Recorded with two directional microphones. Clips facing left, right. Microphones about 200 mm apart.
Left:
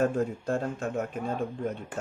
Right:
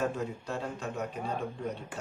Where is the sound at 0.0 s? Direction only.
50° left (ahead or behind).